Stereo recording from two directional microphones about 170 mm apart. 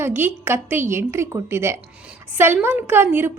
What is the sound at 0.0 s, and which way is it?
A woman's voice, 10° right (ahead or behind).